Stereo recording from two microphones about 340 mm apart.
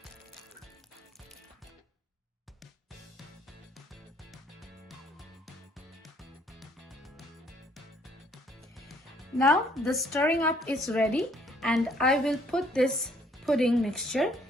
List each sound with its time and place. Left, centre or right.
3.8 s music: centre
9.4 s a woman's voice: centre